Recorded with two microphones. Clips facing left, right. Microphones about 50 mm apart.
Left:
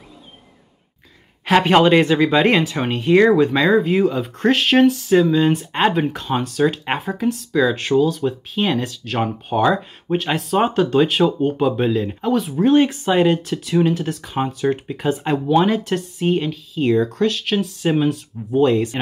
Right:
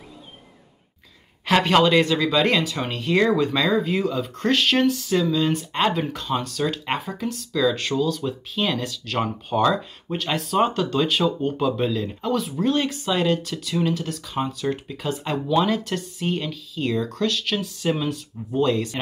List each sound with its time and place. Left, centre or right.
1.4 s speech: centre